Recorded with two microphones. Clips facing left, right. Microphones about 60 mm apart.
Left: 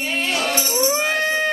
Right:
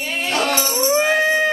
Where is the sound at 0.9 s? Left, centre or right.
Centre.